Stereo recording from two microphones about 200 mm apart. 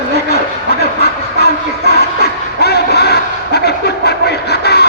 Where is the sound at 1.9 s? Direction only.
55° left (ahead or behind).